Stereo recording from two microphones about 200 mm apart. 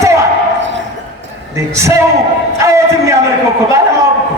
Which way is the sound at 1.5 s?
15° right (ahead or behind).